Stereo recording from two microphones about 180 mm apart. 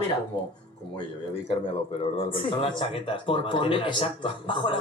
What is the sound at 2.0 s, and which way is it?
Speech, 30° left (ahead or behind).